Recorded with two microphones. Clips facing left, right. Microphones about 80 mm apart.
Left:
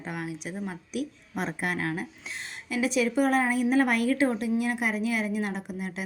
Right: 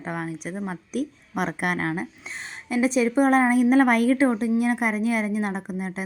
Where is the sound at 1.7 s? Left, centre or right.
Right.